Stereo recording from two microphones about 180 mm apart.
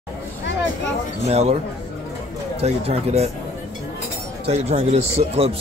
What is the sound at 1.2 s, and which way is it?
Speech, 35° right (ahead or behind).